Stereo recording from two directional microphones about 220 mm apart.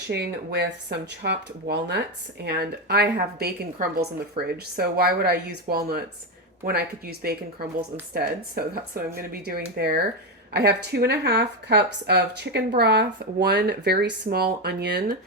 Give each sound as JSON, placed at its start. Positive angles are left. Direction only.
{"t": 0.1, "sound": "speech", "side_deg": -50}